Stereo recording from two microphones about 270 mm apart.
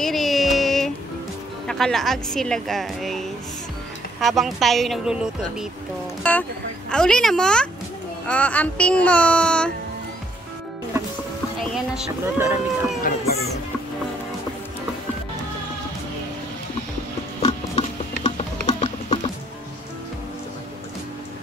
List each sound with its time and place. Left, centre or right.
0.0 s music: centre
1.7 s a woman's voice: centre
11.7 s a woman's voice: centre
17.4 s music: left